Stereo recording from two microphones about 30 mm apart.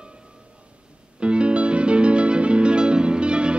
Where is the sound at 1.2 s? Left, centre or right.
Right.